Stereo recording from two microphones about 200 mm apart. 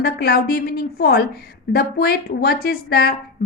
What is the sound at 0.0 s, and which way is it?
A woman's voice, 50° left (ahead or behind).